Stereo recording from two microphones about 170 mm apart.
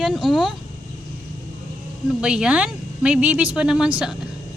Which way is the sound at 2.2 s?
5° right (ahead or behind).